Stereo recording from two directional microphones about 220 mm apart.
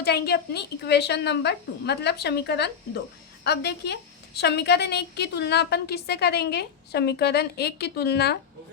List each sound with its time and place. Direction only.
0.0 s a woman's voice: 45° left (ahead or behind)